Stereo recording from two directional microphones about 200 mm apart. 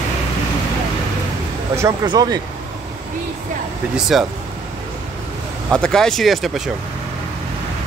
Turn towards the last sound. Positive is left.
turn(degrees=0)  # may be behind; listen again after turning